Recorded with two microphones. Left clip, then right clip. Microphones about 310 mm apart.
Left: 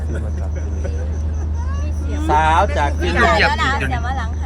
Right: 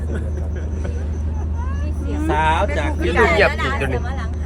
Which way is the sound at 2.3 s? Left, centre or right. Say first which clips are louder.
Left 4 dB; left.